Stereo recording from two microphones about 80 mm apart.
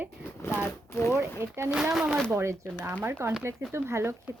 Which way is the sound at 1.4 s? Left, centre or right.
Right.